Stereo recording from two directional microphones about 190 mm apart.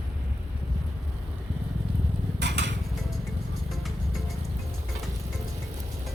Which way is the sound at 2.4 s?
65° right (ahead or behind).